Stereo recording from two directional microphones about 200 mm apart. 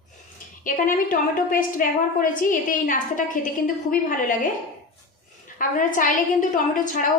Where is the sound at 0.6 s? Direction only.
40° left (ahead or behind).